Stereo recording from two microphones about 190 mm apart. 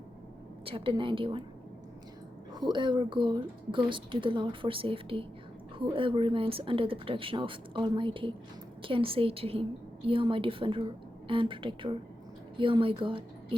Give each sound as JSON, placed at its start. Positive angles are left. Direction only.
{"t": 0.6, "sound": "a woman's voice", "side_deg": -30}
{"t": 2.5, "sound": "a woman's voice", "side_deg": -20}